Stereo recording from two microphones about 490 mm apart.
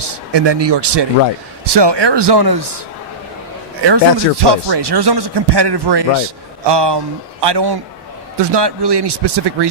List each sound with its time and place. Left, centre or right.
0.0 s speech: right
3.8 s speech: right